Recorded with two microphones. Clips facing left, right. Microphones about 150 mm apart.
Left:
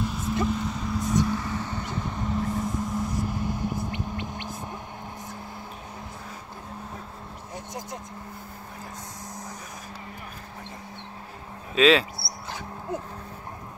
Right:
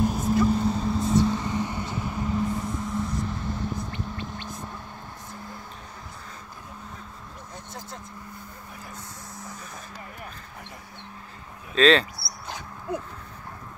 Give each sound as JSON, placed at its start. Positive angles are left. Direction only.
{"t": 0.0, "sound": "vehicle", "side_deg": -45}
{"t": 0.5, "sound": "vehicle", "side_deg": -35}
{"t": 3.9, "sound": "a sound", "side_deg": 15}
{"t": 7.5, "sound": "vehicle", "side_deg": 15}
{"t": 11.7, "sound": "speech", "side_deg": 5}